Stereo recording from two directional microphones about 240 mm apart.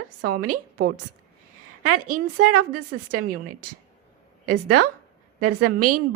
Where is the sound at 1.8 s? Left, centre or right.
Right.